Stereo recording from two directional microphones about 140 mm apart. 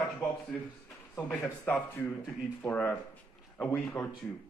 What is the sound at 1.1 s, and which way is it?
A man's voice, 10° left (ahead or behind).